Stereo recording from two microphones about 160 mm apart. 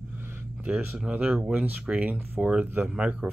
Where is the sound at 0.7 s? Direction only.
5° right (ahead or behind).